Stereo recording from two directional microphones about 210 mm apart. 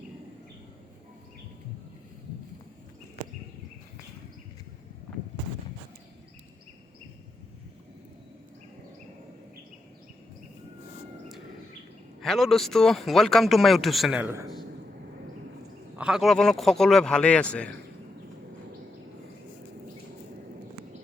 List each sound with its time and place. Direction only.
12.2 s speech: centre (ahead or behind)
16.0 s speech: 5° right (ahead or behind)